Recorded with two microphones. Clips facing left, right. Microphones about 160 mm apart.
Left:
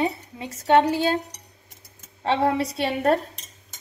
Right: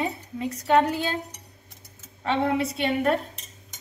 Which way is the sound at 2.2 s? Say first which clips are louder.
Left 2 dB; 35° left (ahead or behind).